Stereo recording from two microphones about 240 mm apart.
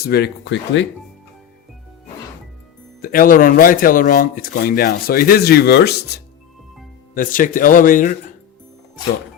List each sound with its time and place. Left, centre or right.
0.0 s speech: left
3.0 s speech: left